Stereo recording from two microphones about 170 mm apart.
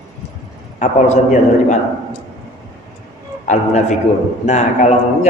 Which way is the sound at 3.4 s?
45° left (ahead or behind).